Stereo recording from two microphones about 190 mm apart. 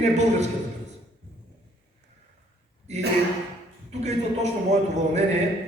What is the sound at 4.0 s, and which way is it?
A man's voice, 35° right (ahead or behind).